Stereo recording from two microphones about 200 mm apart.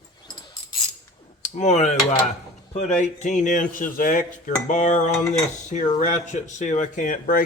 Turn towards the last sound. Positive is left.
turn(degrees=45)  # may be behind; listen again after turning